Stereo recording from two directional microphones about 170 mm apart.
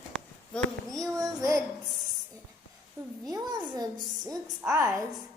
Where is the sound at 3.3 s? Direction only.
20° right (ahead or behind).